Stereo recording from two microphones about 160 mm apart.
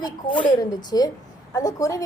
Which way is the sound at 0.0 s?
30° left (ahead or behind).